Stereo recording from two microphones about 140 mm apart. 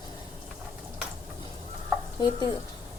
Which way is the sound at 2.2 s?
25° left (ahead or behind).